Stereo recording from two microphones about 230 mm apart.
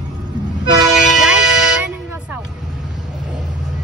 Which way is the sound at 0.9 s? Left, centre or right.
Centre.